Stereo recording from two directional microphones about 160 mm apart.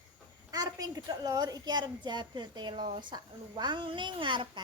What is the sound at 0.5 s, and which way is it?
A woman's voice, 25° right (ahead or behind).